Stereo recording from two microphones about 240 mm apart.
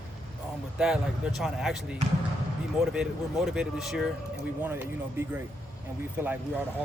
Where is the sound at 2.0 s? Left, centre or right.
Right.